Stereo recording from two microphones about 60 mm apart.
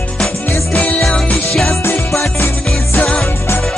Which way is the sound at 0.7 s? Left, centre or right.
Left.